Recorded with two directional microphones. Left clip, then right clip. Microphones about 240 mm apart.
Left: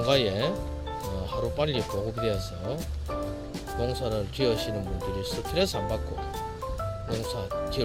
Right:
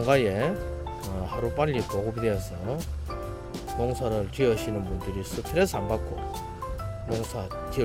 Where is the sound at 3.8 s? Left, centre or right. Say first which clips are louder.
Right 2 dB; centre.